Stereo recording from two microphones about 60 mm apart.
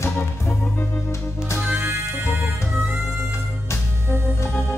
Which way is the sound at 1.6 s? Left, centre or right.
Right.